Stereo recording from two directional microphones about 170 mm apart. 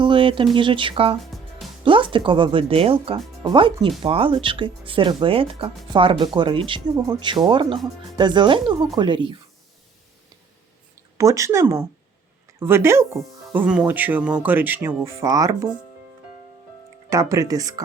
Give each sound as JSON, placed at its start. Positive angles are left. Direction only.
{"t": 0.0, "sound": "a sound", "side_deg": -30}
{"t": 0.5, "sound": "speech", "side_deg": -30}
{"t": 1.2, "sound": "music", "side_deg": 0}
{"t": 1.8, "sound": "speech", "side_deg": -30}
{"t": 11.2, "sound": "speech", "side_deg": -20}
{"t": 17.1, "sound": "speech", "side_deg": -20}